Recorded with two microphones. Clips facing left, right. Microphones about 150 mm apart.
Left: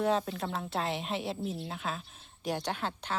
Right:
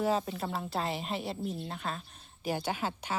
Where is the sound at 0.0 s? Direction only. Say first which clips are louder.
Left 1 dB; centre (ahead or behind).